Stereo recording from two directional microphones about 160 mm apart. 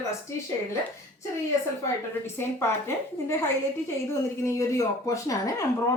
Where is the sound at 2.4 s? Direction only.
15° left (ahead or behind).